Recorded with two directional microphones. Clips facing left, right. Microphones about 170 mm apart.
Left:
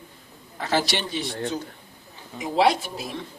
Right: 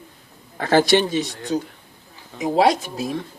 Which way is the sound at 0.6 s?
50° right (ahead or behind).